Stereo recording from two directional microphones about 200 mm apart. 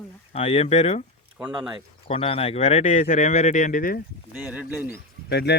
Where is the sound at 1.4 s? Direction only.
5° right (ahead or behind).